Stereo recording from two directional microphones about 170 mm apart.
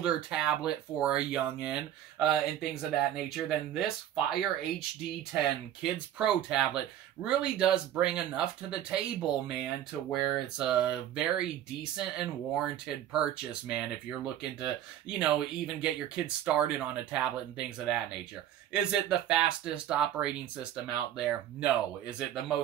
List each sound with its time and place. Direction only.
0.0 s speech: 5° right (ahead or behind)
15.0 s speech: 5° right (ahead or behind)